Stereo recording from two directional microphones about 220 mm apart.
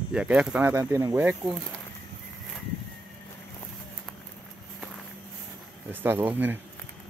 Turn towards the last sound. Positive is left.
turn(degrees=-10)  # may be behind; listen again after turning